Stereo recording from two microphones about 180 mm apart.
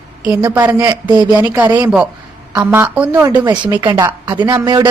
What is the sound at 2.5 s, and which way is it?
Speech, 10° right (ahead or behind).